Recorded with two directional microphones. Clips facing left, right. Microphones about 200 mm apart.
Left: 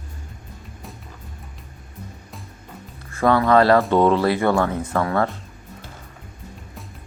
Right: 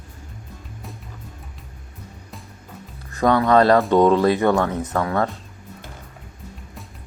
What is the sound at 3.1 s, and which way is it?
Speech, 20° right (ahead or behind).